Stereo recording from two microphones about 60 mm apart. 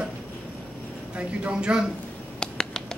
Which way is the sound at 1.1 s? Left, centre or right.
Centre.